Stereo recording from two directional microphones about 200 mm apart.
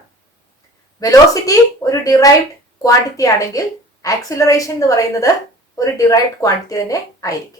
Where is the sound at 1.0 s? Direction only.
15° left (ahead or behind).